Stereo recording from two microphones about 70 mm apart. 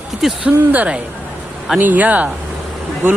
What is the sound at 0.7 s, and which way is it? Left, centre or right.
Speech, right.